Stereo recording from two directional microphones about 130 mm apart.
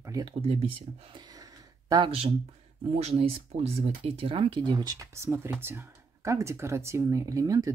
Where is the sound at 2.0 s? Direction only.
50° right (ahead or behind).